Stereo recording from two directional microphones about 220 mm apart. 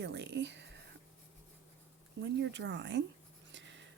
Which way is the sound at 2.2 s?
55° right (ahead or behind).